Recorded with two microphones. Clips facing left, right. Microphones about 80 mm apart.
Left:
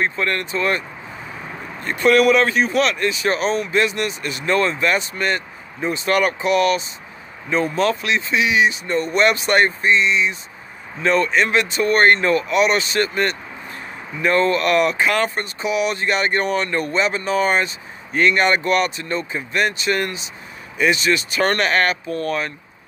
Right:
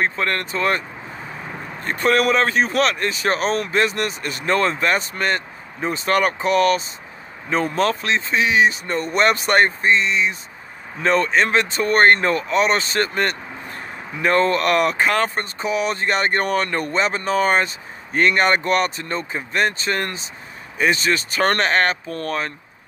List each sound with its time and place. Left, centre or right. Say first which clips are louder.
0.0 s speech: even; right